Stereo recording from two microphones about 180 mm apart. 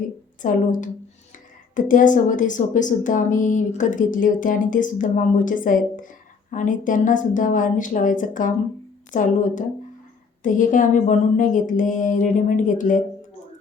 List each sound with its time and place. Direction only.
0.4 s a woman's voice: 45° left (ahead or behind)